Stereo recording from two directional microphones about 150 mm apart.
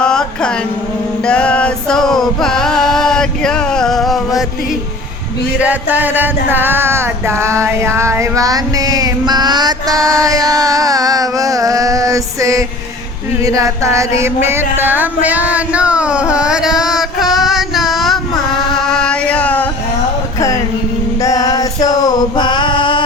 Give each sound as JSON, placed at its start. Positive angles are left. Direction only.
{"t": 0.0, "sound": "music", "side_deg": 5}
{"t": 5.5, "sound": "music", "side_deg": -10}
{"t": 14.4, "sound": "a sound", "side_deg": -15}
{"t": 21.2, "sound": "male singing", "side_deg": 25}